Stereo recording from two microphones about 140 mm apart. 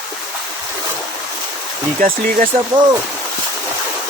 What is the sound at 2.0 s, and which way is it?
Speech, 75° right (ahead or behind).